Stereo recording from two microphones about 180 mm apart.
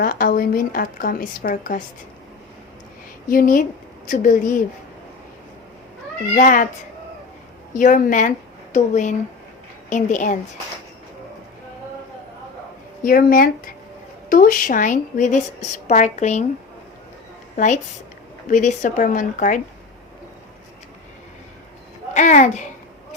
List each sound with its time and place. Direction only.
0.0 s a woman's voice: 50° left (ahead or behind)
3.2 s a woman's voice: 50° left (ahead or behind)
6.3 s a woman's voice: 45° left (ahead or behind)
7.8 s a woman's voice: 45° left (ahead or behind)
13.0 s a woman's voice: 50° left (ahead or behind)
18.4 s a woman's voice: 45° left (ahead or behind)
22.1 s speech: 40° left (ahead or behind)